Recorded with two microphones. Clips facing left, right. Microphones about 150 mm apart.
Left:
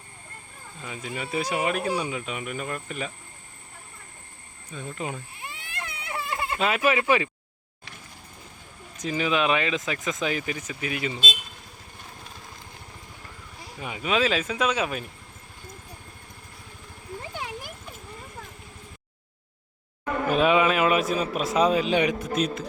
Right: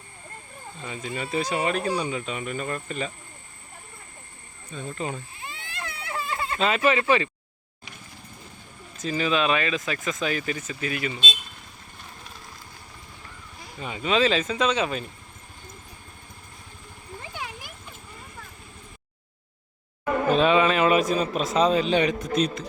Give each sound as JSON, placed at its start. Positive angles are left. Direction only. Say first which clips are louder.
{"t": 0.8, "sound": "speech", "louder": "right 2 dB", "side_deg": 5}
{"t": 4.7, "sound": "a sound", "louder": "right 2 dB", "side_deg": 10}
{"t": 9.0, "sound": "speech", "louder": "even", "side_deg": 15}
{"t": 13.7, "sound": "speech", "louder": "right 2 dB", "side_deg": 10}
{"t": 20.3, "sound": "a man's voice", "louder": "even", "side_deg": 10}